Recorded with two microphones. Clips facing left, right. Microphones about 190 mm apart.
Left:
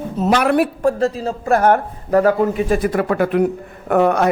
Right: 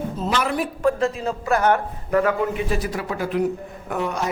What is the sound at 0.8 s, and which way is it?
Speech, 40° left (ahead or behind).